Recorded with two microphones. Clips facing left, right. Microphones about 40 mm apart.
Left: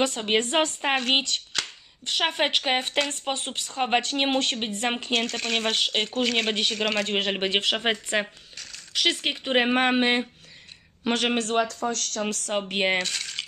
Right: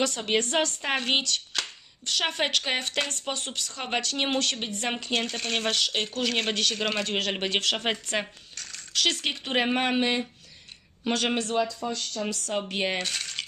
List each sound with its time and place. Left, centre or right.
0.0 s speech: left
5.2 s speech: centre
5.7 s speech: left
6.1 s speech: centre
7.1 s speech: left
8.5 s a sound: centre
8.9 s speech: centre
9.8 s speech: left
11.3 s speech: left
12.5 s speech: left
13.0 s coin: centre